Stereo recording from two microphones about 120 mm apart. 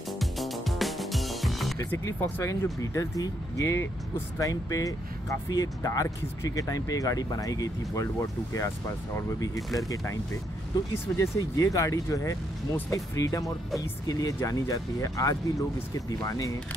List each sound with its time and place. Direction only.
0.2 s music: centre (ahead or behind)
1.9 s speech: 15° left (ahead or behind)
9.6 s speech: centre (ahead or behind)
11.1 s speech: 25° left (ahead or behind)